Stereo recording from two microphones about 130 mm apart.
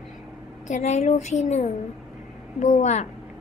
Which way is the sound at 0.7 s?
60° left (ahead or behind).